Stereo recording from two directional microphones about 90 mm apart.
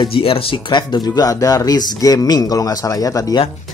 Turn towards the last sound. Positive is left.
turn(degrees=40)  # may be behind; listen again after turning